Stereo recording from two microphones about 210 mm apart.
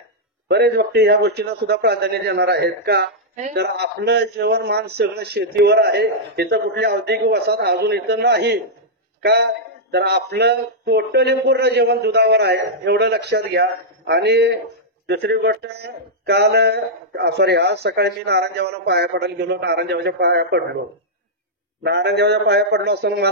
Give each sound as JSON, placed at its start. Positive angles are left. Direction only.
{"t": 0.5, "sound": "speech", "side_deg": -50}
{"t": 21.8, "sound": "speech", "side_deg": -55}